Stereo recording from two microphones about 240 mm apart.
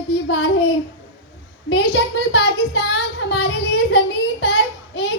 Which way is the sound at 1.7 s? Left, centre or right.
Left.